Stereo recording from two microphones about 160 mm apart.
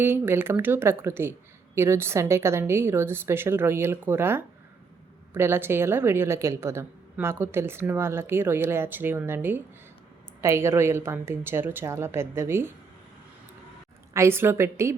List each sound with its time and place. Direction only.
0.0 s a woman's voice: 15° right (ahead or behind)
14.1 s a woman's voice: 15° right (ahead or behind)